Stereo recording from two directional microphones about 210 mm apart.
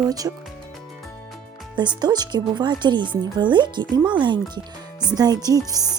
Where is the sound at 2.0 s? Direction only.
20° right (ahead or behind).